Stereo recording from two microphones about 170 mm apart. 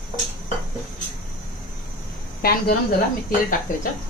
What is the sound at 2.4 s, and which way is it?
Speech, 60° left (ahead or behind).